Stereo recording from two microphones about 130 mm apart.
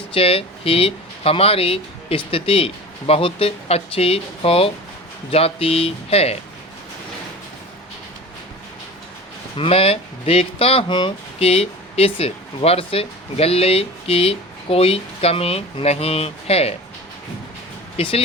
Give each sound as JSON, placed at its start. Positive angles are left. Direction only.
{"t": 0.1, "sound": "speech", "side_deg": 45}
{"t": 9.6, "sound": "speech", "side_deg": 50}
{"t": 17.9, "sound": "speech", "side_deg": 50}